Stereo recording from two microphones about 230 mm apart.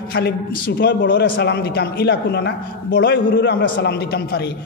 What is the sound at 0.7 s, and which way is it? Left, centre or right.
A man's voice, left.